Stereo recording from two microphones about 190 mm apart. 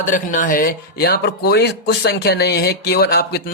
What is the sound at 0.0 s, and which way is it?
Speech, 40° left (ahead or behind).